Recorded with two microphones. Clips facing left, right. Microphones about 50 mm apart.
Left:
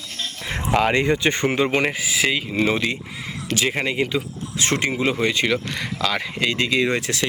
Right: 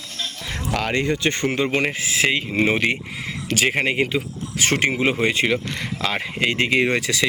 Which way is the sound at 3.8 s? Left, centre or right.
Right.